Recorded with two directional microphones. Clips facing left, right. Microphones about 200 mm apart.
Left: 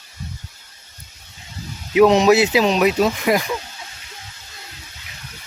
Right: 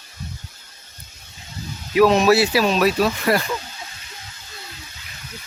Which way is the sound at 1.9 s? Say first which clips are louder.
Left 2 dB; 20° left (ahead or behind).